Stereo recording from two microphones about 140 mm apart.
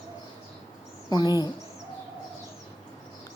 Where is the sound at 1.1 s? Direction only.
30° left (ahead or behind).